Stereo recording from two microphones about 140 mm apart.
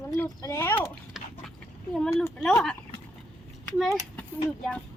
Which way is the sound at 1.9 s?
5° left (ahead or behind).